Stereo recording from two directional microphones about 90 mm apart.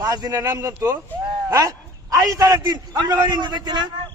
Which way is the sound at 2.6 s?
55° right (ahead or behind).